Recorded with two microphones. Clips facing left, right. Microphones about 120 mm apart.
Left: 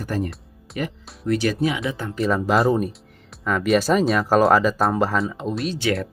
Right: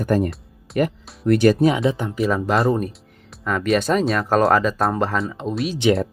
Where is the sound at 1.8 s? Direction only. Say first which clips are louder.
Right 6 dB; 25° right (ahead or behind).